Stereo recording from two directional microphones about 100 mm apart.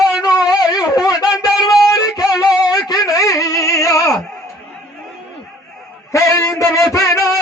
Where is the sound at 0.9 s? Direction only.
40° left (ahead or behind).